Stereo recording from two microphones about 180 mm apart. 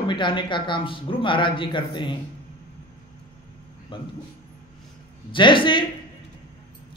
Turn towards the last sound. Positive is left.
turn(degrees=25)  # may be behind; listen again after turning